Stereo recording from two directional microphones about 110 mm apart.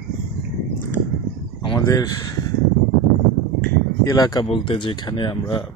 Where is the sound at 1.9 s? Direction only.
35° left (ahead or behind).